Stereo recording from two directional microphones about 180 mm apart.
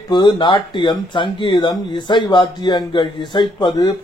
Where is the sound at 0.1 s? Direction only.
25° left (ahead or behind).